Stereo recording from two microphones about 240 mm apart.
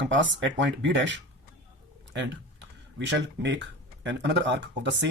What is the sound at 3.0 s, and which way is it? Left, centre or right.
Speech, right.